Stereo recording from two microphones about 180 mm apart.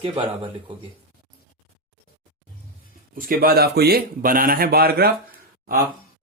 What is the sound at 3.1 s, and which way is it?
A man's voice, 50° right (ahead or behind).